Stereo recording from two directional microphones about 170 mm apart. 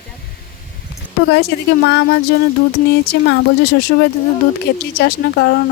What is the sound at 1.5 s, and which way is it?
Speech, 75° left (ahead or behind).